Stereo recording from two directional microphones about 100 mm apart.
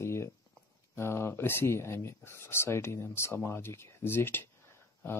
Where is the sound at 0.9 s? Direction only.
25° left (ahead or behind).